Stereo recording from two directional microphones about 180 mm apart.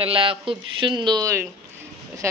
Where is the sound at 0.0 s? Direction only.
30° right (ahead or behind).